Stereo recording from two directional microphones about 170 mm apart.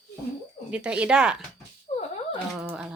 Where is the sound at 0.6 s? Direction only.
5° right (ahead or behind).